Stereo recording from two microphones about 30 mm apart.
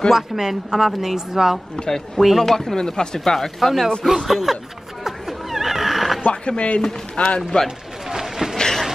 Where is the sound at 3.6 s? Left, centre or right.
Centre.